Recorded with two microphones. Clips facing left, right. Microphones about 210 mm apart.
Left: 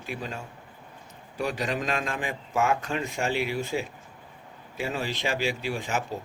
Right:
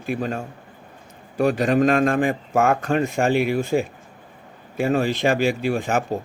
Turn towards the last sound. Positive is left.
turn(degrees=-55)  # may be behind; listen again after turning